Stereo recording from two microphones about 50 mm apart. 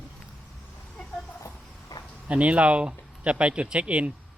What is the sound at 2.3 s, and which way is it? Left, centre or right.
A man's voice, right.